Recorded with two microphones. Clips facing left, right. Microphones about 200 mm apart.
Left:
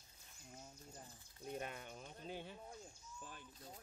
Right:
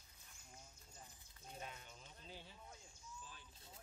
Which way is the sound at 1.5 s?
60° left (ahead or behind).